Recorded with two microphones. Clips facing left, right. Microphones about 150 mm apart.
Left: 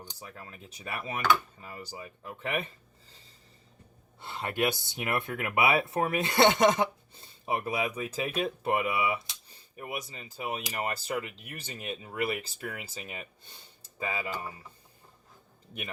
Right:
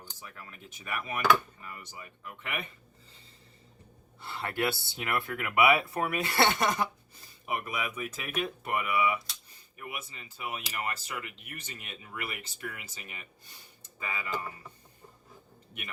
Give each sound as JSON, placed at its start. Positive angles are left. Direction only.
{"t": 0.2, "sound": "speech", "side_deg": 30}
{"t": 4.2, "sound": "speech", "side_deg": 20}